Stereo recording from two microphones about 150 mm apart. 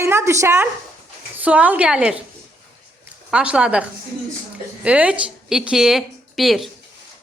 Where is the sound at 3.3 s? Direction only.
5° right (ahead or behind).